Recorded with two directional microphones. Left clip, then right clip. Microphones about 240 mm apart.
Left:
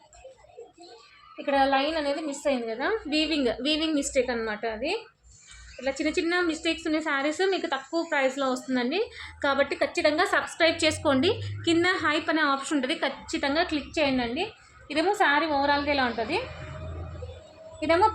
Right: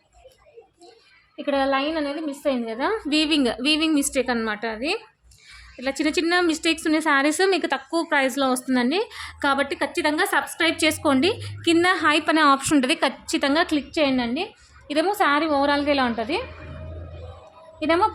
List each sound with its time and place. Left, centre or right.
1.4 s a woman's voice: right
2.6 s a woman's voice: right
17.7 s a woman's voice: right